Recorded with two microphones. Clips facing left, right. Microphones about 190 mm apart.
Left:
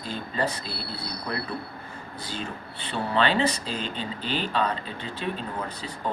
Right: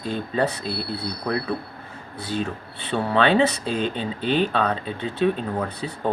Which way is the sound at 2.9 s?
60° right (ahead or behind).